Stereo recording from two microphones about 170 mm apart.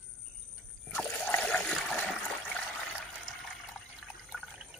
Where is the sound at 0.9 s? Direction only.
10° left (ahead or behind).